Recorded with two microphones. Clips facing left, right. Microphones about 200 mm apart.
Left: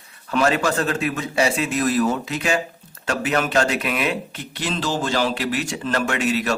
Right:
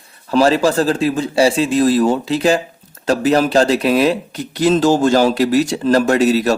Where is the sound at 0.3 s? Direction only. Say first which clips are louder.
Right 7 dB; 30° right (ahead or behind).